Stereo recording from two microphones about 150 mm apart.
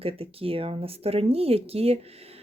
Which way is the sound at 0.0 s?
40° right (ahead or behind).